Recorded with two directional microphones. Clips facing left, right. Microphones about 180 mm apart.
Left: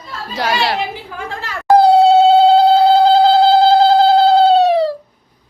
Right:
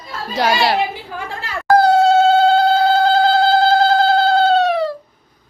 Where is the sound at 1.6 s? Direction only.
30° left (ahead or behind).